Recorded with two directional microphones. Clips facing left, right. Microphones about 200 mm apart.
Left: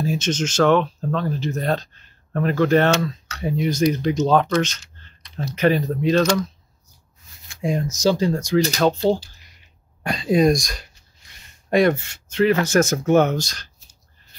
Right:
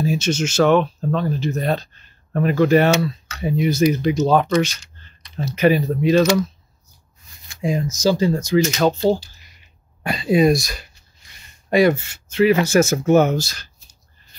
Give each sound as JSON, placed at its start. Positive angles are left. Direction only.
{"t": 0.0, "sound": "speech", "side_deg": -10}
{"t": 7.4, "sound": "speech", "side_deg": 0}